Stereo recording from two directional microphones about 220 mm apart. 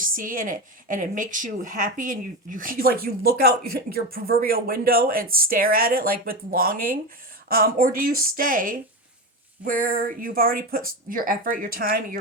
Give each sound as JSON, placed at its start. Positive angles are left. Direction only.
{"t": 0.0, "sound": "a woman's voice", "side_deg": -40}